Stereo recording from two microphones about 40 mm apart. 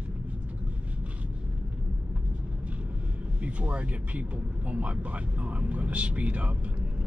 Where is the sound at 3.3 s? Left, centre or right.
Right.